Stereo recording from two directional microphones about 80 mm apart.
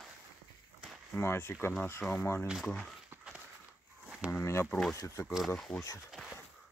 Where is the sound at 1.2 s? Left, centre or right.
Left.